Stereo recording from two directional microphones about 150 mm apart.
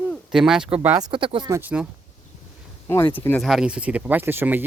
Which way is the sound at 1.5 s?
10° right (ahead or behind).